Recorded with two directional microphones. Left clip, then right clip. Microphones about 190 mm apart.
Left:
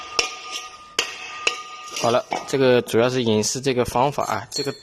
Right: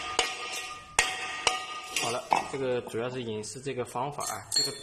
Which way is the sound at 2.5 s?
70° left (ahead or behind).